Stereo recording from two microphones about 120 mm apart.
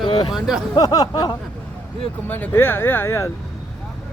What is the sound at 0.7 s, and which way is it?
Speech, 30° left (ahead or behind).